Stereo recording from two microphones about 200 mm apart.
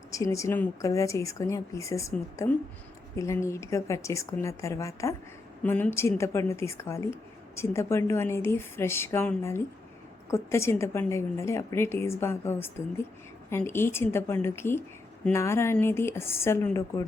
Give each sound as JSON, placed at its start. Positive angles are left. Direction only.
{"t": 0.1, "sound": "speech", "side_deg": 15}